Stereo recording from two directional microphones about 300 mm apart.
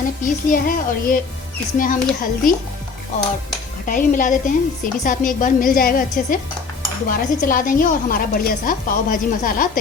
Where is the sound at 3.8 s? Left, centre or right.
Left.